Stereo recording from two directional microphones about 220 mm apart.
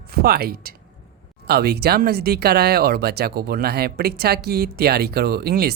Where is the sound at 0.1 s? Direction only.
45° right (ahead or behind).